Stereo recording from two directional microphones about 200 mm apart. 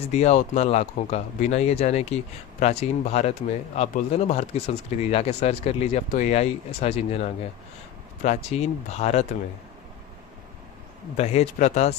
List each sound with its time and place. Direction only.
0.1 s speech: 35° left (ahead or behind)
11.2 s speech: 35° left (ahead or behind)